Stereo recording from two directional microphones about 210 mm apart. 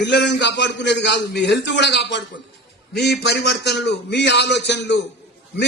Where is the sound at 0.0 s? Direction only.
55° left (ahead or behind).